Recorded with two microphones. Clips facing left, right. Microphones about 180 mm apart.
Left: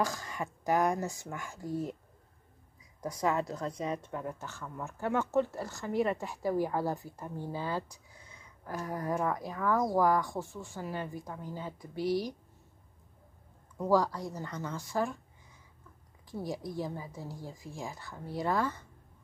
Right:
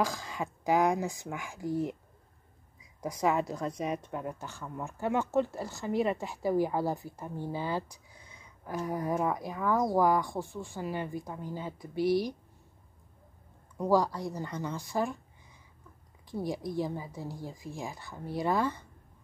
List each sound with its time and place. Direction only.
0.4 s a woman's voice: 15° right (ahead or behind)
3.0 s a woman's voice: 10° right (ahead or behind)
13.7 s a woman's voice: 15° right (ahead or behind)
16.3 s a woman's voice: 15° right (ahead or behind)